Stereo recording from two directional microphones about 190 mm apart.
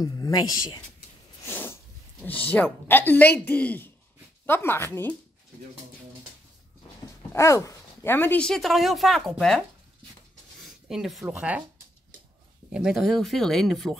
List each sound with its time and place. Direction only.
0.0 s speech: 20° left (ahead or behind)
7.3 s speech: 15° left (ahead or behind); by 11.6 s 5° right (ahead or behind)
12.7 s speech: centre (ahead or behind)